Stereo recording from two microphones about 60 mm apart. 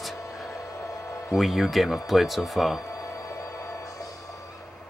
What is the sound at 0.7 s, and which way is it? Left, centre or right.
Music, left.